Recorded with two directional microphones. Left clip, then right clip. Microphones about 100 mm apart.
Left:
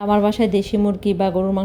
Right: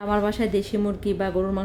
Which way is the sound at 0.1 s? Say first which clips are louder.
Left 5 dB; 40° left (ahead or behind).